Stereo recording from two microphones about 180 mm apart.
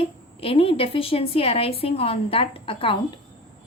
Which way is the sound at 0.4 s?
30° left (ahead or behind).